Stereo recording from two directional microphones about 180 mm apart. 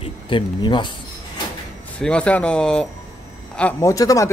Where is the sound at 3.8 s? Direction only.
20° left (ahead or behind).